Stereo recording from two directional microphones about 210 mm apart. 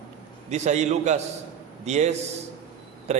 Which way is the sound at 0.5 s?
35° right (ahead or behind).